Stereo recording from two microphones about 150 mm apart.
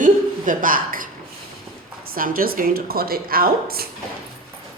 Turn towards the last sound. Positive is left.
turn(degrees=-85)